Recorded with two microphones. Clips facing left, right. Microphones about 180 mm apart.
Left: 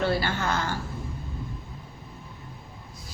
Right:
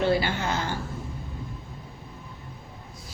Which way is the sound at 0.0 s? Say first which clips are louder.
Right 2 dB; 15° right (ahead or behind).